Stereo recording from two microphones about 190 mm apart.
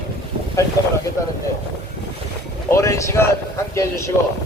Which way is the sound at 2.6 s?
15° left (ahead or behind).